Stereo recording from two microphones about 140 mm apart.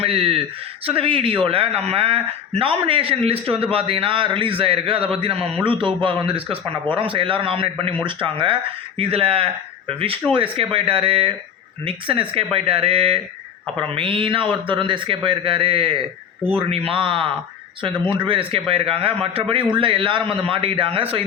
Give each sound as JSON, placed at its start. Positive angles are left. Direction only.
{"t": 0.0, "sound": "a man's voice", "side_deg": -40}